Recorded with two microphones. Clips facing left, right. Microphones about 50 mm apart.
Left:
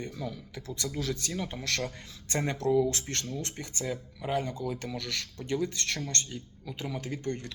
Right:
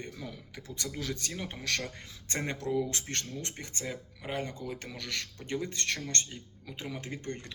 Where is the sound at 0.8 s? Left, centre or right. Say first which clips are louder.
Left 4 dB; centre.